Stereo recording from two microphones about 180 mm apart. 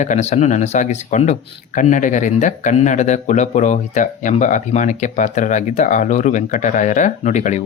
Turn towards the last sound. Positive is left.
turn(degrees=40)  # may be behind; listen again after turning